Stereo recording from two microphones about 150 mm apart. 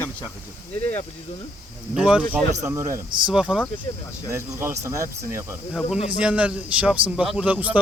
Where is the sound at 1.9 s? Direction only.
5° right (ahead or behind).